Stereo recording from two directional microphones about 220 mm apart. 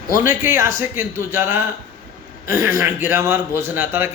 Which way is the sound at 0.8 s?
10° right (ahead or behind).